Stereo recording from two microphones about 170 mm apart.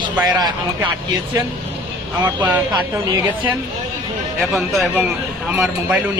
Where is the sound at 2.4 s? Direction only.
15° right (ahead or behind).